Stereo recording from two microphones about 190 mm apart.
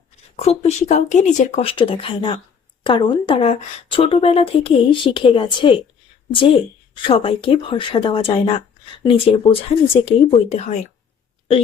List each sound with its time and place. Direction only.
0.3 s speech: 35° left (ahead or behind)
1.7 s a woman's voice: 25° left (ahead or behind)
6.9 s a woman's voice: 25° left (ahead or behind)